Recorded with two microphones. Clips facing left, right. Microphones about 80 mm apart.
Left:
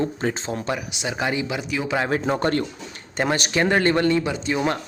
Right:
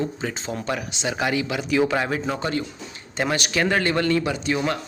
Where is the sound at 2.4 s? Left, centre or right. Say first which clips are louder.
Left 4 dB; left.